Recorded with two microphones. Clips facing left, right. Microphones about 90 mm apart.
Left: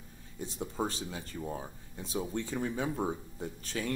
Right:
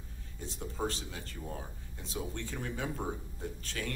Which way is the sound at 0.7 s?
15° left (ahead or behind).